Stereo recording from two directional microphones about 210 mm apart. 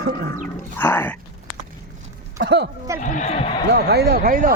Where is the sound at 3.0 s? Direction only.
35° left (ahead or behind).